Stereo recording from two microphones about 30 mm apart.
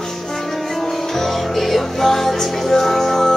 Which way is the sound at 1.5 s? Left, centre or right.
Centre.